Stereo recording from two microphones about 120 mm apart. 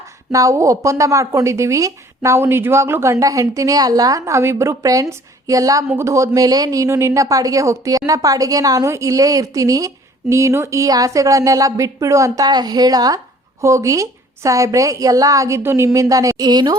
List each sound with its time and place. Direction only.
0.3 s speech: 25° right (ahead or behind)